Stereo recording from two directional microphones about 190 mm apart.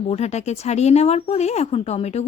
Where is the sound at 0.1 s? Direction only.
35° left (ahead or behind).